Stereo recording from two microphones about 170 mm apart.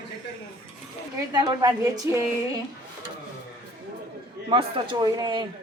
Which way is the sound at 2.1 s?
15° right (ahead or behind).